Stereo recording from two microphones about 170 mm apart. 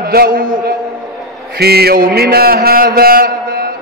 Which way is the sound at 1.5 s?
70° right (ahead or behind).